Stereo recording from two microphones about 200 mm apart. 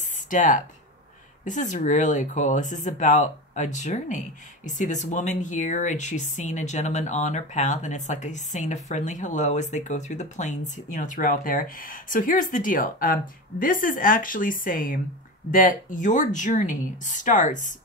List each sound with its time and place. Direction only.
0.3 s speech: 40° left (ahead or behind)